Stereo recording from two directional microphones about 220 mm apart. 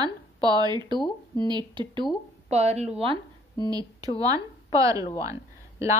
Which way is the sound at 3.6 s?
15° right (ahead or behind).